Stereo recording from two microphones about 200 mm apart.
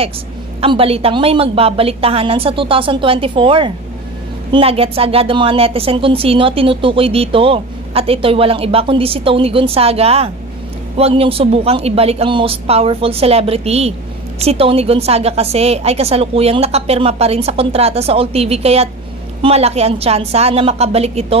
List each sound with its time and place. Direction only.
0.6 s a woman's voice: 30° right (ahead or behind)